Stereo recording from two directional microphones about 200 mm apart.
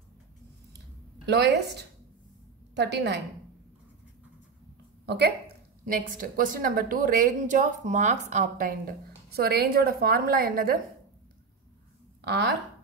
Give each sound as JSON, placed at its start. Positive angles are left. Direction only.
{"t": 1.2, "sound": "a woman's voice", "side_deg": -55}
{"t": 5.0, "sound": "speech", "side_deg": -55}
{"t": 5.9, "sound": "a woman's voice", "side_deg": -45}
{"t": 12.3, "sound": "a woman's voice", "side_deg": -60}